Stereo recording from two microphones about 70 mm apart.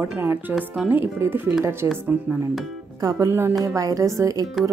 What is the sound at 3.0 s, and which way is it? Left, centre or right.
Speech, right.